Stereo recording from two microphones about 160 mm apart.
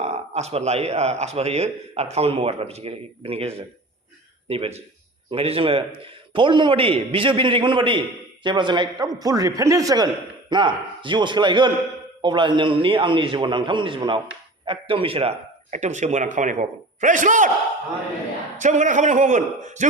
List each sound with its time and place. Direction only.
0.0 s a man's voice: 40° right (ahead or behind)
18.5 s speech: 50° right (ahead or behind)